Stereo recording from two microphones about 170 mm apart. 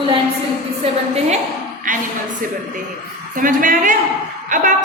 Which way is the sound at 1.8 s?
50° right (ahead or behind).